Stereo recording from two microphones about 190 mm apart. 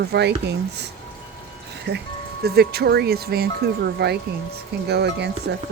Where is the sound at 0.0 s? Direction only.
60° right (ahead or behind).